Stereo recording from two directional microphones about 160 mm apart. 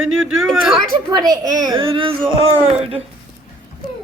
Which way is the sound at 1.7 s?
35° right (ahead or behind).